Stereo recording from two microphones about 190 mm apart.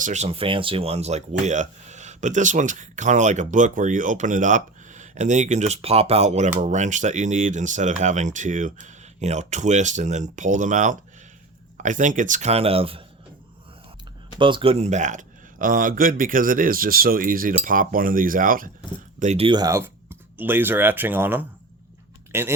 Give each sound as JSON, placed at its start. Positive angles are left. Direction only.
{"t": 0.0, "sound": "speech", "side_deg": -35}
{"t": 14.3, "sound": "speech", "side_deg": -25}
{"t": 19.2, "sound": "speech", "side_deg": -35}
{"t": 19.5, "sound": "speech", "side_deg": -20}